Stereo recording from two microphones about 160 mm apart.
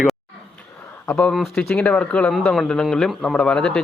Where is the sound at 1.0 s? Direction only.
5° left (ahead or behind).